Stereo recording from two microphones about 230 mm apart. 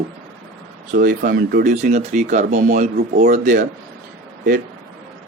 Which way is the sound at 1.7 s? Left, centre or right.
Right.